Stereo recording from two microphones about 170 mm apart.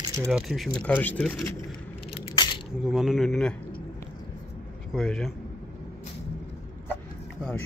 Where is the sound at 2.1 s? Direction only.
25° left (ahead or behind).